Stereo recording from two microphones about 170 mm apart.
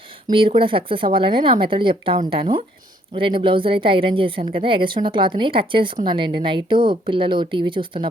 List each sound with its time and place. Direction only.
0.3 s a woman's voice: 30° right (ahead or behind)